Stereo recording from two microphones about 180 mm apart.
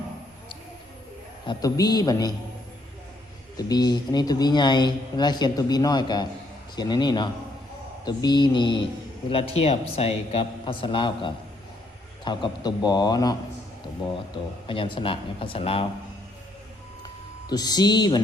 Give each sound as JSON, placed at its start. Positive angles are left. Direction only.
{"t": 1.5, "sound": "speech", "side_deg": 20}
{"t": 3.6, "sound": "speech", "side_deg": 20}
{"t": 14.7, "sound": "speech", "side_deg": 30}
{"t": 17.5, "sound": "speech", "side_deg": 20}